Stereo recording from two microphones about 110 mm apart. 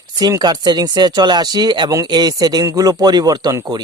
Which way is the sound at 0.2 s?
40° right (ahead or behind).